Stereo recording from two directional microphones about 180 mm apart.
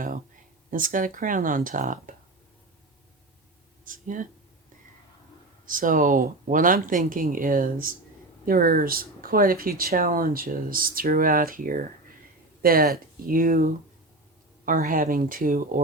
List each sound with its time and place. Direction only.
0.7 s speech: 50° right (ahead or behind)
3.8 s speech: 50° right (ahead or behind)
5.6 s speech: 50° right (ahead or behind)